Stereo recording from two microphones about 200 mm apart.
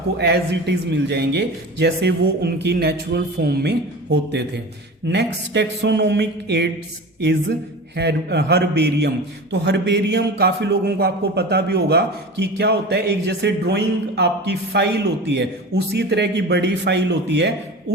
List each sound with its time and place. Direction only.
0.2 s a man's voice: 55° right (ahead or behind)
7.9 s a man's voice: 55° right (ahead or behind)